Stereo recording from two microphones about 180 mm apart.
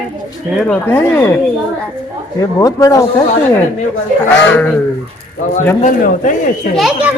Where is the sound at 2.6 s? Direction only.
20° left (ahead or behind).